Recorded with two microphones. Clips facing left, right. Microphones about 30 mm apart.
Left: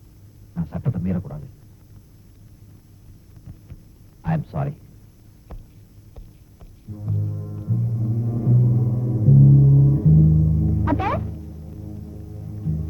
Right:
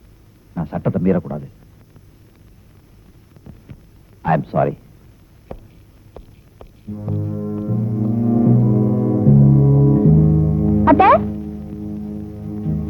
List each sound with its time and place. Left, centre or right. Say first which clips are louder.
0.5 s a man's voice: right 7 dB; right
3.5 s heart sounds: right 4 dB; right
4.2 s a man's voice: right 10 dB; right
5.5 s a sound: right 10 dB; right
6.1 s music: right 11 dB; right